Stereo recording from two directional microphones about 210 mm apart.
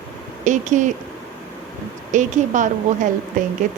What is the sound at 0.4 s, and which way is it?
Speech, 35° right (ahead or behind).